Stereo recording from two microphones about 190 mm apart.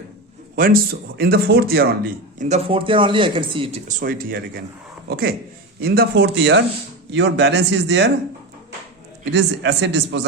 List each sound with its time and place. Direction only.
0.5 s a man's voice: 50° right (ahead or behind)
2.5 s speech: 30° right (ahead or behind)
3.8 s a man's voice: 50° right (ahead or behind); by 8.1 s 65° right (ahead or behind)
9.3 s speech: 65° right (ahead or behind)